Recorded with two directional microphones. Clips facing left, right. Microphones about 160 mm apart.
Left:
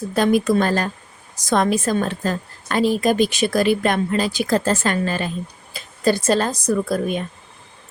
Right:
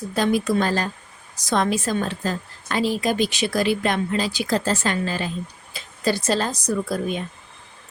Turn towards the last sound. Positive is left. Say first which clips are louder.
# left 4 dB
turn(degrees=55)  # may be behind; listen again after turning